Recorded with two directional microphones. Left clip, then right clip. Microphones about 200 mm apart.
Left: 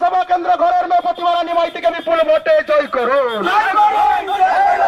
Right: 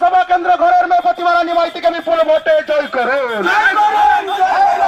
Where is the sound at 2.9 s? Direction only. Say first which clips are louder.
Even; 5° right (ahead or behind).